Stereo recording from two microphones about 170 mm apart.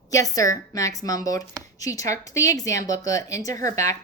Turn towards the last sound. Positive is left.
turn(degrees=20)  # may be behind; listen again after turning